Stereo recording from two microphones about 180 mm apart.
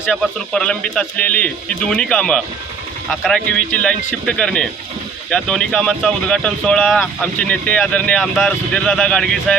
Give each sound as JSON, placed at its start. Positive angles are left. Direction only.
{"t": 0.1, "sound": "speech", "side_deg": 5}